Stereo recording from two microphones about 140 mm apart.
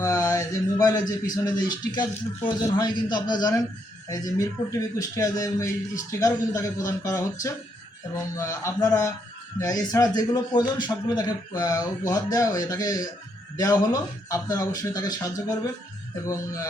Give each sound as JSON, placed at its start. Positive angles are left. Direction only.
{"t": 0.0, "sound": "a man's voice", "side_deg": 20}
{"t": 8.4, "sound": "a man's voice", "side_deg": 20}